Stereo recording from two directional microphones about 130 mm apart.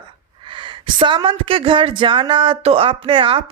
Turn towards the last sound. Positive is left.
turn(degrees=-40)  # may be behind; listen again after turning